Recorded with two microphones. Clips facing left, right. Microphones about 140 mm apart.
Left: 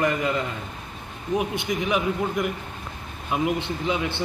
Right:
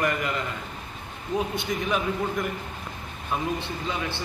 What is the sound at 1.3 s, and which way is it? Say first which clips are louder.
Speech: left 2 dB; 20° left (ahead or behind).